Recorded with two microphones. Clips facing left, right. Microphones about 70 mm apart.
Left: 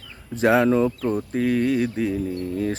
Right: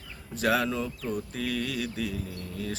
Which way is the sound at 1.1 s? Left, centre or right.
Left.